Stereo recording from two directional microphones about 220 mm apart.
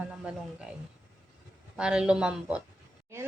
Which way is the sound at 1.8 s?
5° right (ahead or behind).